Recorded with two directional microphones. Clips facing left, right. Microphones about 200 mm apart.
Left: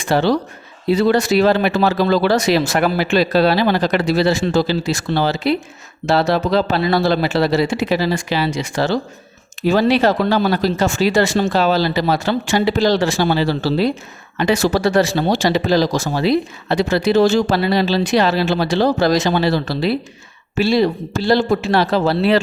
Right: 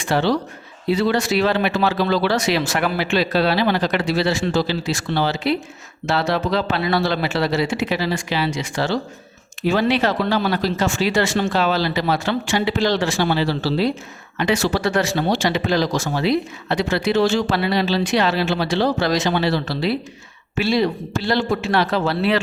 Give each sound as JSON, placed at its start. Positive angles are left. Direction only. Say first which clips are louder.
{"t": 0.1, "sound": "speech", "louder": "left 3 dB", "side_deg": 40}